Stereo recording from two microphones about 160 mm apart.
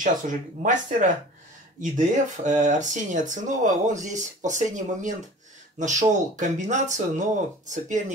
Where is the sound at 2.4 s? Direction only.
50° right (ahead or behind).